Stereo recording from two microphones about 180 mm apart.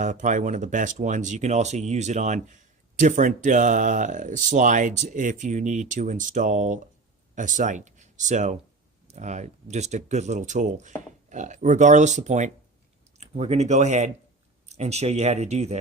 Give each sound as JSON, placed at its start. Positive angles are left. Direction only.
{"t": 0.0, "sound": "speech", "side_deg": -45}